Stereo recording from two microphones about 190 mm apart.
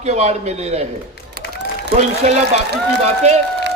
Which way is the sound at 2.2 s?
35° right (ahead or behind).